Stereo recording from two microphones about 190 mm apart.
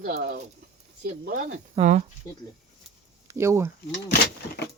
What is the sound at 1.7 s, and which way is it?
Speech, 40° right (ahead or behind).